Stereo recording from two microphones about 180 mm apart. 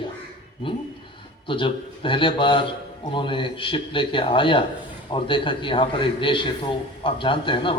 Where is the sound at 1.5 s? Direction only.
30° left (ahead or behind).